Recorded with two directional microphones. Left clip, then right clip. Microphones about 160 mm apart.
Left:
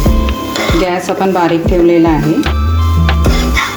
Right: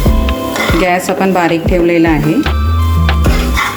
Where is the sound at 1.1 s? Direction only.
15° right (ahead or behind).